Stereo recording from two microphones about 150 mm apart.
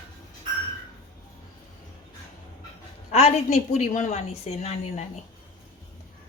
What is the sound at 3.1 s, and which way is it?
A woman's voice, 50° left (ahead or behind).